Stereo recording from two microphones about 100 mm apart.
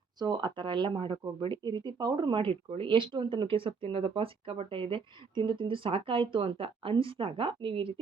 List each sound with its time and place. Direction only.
0.2 s speech: 45° right (ahead or behind)